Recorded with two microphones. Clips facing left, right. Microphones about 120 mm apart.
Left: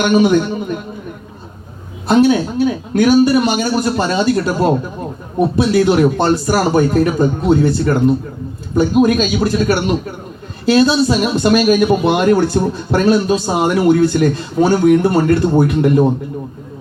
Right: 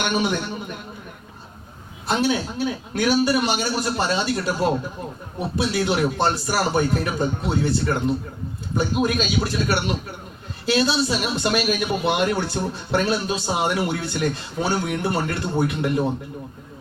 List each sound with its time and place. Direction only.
0.1 s speech: 45° left (ahead or behind)
2.0 s speech: 50° left (ahead or behind)